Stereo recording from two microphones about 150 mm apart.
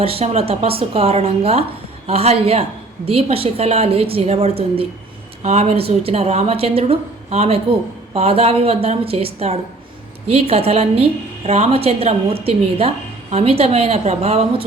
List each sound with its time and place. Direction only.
0.0 s a woman's voice: 40° right (ahead or behind)